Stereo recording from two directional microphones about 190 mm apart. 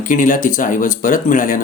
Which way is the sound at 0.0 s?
45° left (ahead or behind).